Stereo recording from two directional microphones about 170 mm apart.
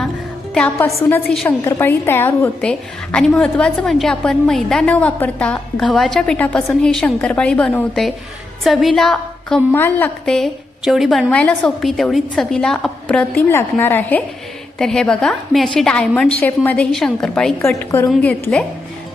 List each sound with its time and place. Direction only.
0.5 s a woman's voice: 10° left (ahead or behind)
1.3 s a woman's voice: 5° left (ahead or behind)
17.7 s a woman's voice: 15° left (ahead or behind)